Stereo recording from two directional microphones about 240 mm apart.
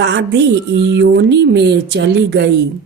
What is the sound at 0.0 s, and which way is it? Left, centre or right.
A woman's voice, right.